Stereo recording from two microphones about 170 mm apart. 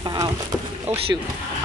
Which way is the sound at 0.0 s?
25° right (ahead or behind).